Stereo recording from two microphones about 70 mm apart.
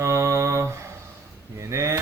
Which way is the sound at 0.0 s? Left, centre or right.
Right.